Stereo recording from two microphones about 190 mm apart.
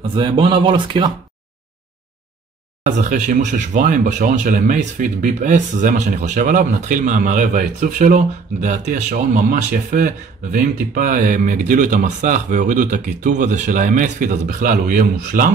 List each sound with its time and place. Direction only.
0.1 s speech: 25° right (ahead or behind)
3.0 s speech: 40° right (ahead or behind)